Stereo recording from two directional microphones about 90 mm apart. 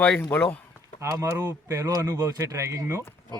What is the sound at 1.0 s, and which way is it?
Speech, 35° right (ahead or behind).